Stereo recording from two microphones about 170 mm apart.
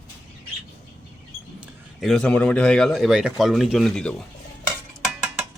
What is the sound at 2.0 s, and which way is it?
A man's voice, 5° left (ahead or behind).